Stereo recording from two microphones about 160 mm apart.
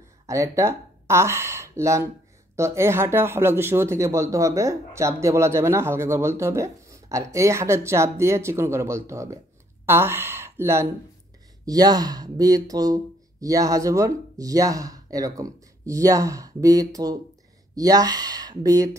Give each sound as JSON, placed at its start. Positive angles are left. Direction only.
{"t": 0.3, "sound": "speech", "side_deg": -20}